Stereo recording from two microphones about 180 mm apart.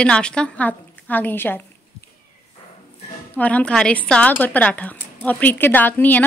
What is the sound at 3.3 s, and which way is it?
A woman's voice, 10° left (ahead or behind).